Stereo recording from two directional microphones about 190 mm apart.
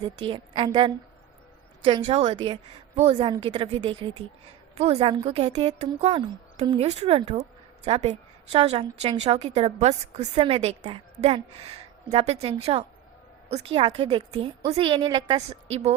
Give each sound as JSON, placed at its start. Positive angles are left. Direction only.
{"t": 0.0, "sound": "a woman's voice", "side_deg": -25}